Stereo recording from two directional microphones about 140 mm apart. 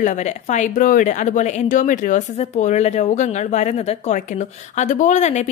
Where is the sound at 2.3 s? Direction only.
55° left (ahead or behind).